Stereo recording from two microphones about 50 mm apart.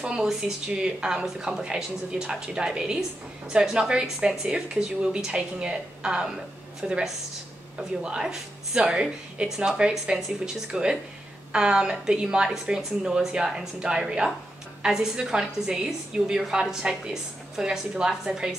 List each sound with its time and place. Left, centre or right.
0.0 s a woman's voice: centre